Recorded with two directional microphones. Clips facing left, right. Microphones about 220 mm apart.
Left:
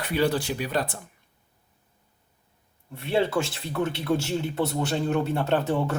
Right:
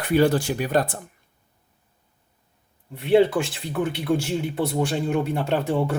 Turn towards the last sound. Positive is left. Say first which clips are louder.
# right 2 dB
turn(degrees=-10)  # may be behind; listen again after turning